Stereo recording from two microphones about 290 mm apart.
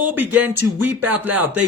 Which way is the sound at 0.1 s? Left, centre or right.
Centre.